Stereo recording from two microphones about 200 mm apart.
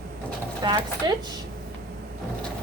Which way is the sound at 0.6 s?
20° right (ahead or behind).